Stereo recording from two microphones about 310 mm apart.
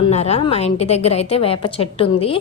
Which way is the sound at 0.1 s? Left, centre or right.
Centre.